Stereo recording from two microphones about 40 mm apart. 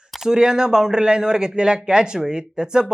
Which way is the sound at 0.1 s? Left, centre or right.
Centre.